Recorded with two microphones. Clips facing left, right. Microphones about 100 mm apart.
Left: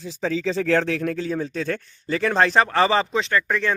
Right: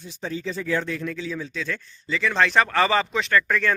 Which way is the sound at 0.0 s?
90° left.